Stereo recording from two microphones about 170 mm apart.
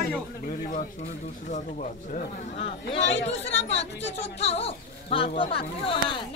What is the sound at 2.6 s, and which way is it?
Speech, 35° left (ahead or behind).